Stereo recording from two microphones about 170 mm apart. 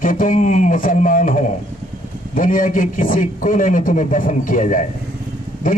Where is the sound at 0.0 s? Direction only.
50° left (ahead or behind).